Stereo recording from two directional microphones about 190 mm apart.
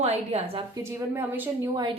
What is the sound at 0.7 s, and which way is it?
Speech, 15° right (ahead or behind).